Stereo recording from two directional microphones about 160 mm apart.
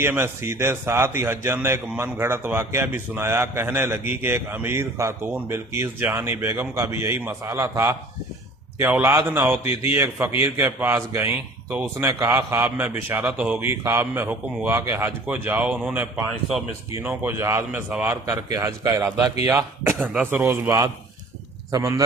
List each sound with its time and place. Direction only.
0.0 s a man's voice: 15° right (ahead or behind)